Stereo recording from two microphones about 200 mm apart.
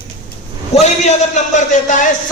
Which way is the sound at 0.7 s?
35° left (ahead or behind).